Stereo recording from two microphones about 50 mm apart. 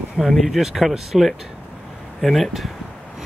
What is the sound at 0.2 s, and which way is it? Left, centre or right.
Speech, centre.